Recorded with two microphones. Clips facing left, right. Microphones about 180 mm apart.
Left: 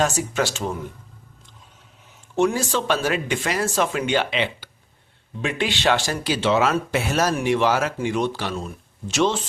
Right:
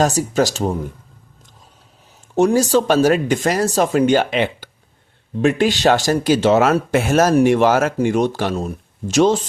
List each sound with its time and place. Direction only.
0.0 s speech: 40° right (ahead or behind)
2.3 s speech: 40° right (ahead or behind)